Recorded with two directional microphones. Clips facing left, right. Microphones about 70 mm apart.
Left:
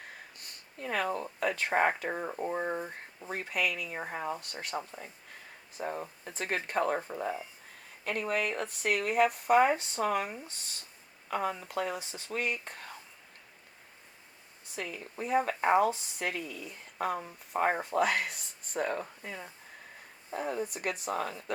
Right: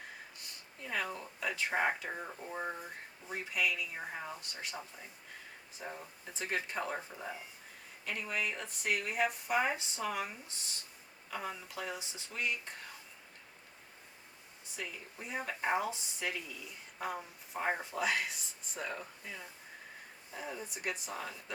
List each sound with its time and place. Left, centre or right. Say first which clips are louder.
0.3 s a sound: left 5 dB; left
1.0 s speech: left 7 dB; left
14.8 s speech: left 7 dB; left